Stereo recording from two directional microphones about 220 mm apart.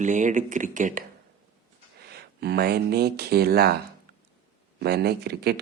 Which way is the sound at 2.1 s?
45° right (ahead or behind).